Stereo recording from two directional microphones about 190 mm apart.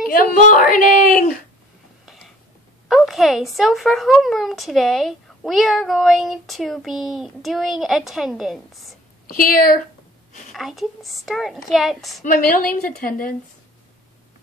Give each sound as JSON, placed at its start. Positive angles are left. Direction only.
{"t": 0.0, "sound": "a woman's voice", "side_deg": 50}
{"t": 2.0, "sound": "a sound", "side_deg": 0}
{"t": 2.9, "sound": "speech", "side_deg": 0}
{"t": 9.3, "sound": "a woman's voice", "side_deg": 50}
{"t": 10.5, "sound": "speech", "side_deg": 0}
{"t": 12.2, "sound": "a woman's voice", "side_deg": 45}